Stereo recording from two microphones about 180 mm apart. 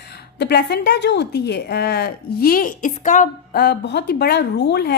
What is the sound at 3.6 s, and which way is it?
Speech, 70° left (ahead or behind).